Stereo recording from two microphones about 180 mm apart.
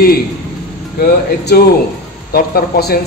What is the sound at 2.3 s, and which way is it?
Speech, 60° left (ahead or behind).